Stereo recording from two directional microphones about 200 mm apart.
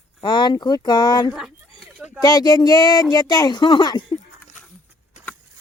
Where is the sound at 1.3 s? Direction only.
Centre (ahead or behind).